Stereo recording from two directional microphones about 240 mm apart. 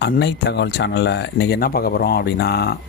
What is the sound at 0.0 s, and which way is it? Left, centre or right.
Speech, left.